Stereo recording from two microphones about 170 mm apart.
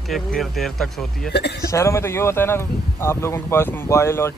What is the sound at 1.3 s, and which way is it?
Speech, 75° left (ahead or behind).